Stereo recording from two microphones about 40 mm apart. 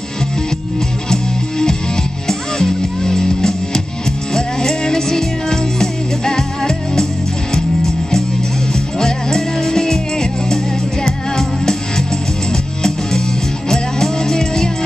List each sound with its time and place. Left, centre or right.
1.1 s music: centre
13.7 s music: centre